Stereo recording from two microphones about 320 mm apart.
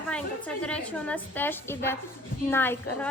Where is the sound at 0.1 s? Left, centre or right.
Centre.